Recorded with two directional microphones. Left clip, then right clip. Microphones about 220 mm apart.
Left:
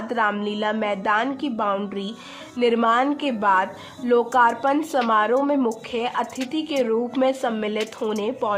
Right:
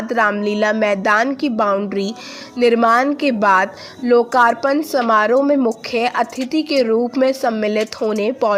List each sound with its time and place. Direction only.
0.1 s a woman's voice: 15° right (ahead or behind)